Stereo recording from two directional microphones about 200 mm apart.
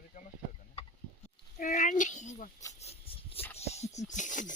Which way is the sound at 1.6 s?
40° left (ahead or behind).